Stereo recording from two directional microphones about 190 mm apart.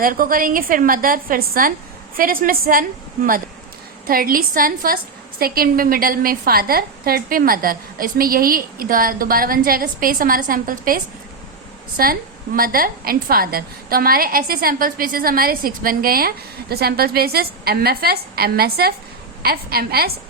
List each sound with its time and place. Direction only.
0.0 s a woman's voice: 50° right (ahead or behind)
4.0 s a woman's voice: 50° right (ahead or behind)